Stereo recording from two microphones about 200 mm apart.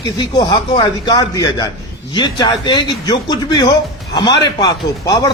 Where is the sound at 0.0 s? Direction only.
20° left (ahead or behind).